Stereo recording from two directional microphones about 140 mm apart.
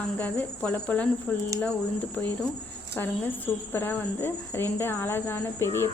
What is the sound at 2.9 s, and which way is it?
Speech, 15° left (ahead or behind).